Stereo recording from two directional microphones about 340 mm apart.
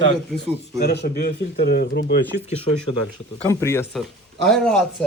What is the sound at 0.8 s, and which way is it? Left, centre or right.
Speech, left.